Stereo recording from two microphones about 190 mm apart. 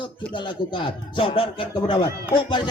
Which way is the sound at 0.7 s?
25° left (ahead or behind).